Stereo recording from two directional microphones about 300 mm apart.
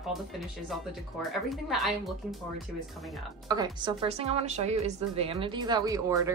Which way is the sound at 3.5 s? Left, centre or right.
Centre.